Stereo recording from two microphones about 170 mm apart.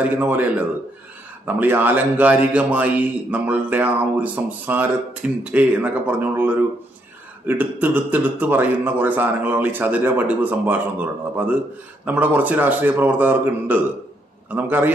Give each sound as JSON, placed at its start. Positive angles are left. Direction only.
{"t": 0.0, "sound": "a man's voice", "side_deg": -10}